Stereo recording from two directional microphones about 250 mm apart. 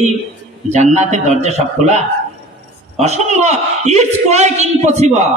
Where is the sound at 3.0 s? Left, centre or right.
Right.